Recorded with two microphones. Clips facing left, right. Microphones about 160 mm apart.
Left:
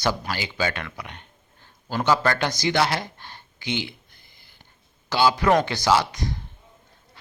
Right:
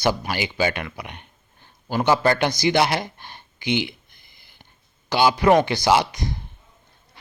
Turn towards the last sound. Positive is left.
turn(degrees=-15)  # may be behind; listen again after turning